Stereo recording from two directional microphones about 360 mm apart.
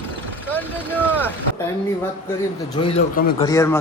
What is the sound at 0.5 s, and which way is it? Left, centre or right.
Speech, centre.